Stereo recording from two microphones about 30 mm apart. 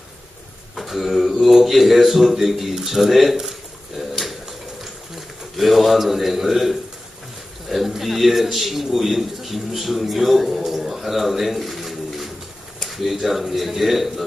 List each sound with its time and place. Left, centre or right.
0.7 s a man's voice: centre